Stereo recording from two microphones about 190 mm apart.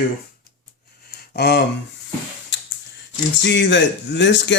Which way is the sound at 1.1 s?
55° left (ahead or behind).